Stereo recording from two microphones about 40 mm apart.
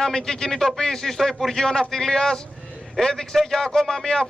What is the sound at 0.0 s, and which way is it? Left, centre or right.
A man's voice, centre.